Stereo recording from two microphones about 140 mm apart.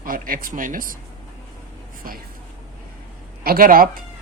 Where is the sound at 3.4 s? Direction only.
90° right.